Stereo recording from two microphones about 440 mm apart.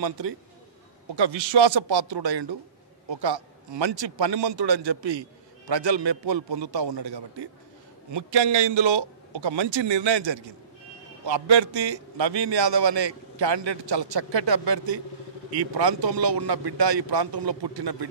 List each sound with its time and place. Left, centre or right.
1.1 s a man's voice: right
3.1 s a man's voice: right
8.1 s a man's voice: right
15.5 s a man's voice: right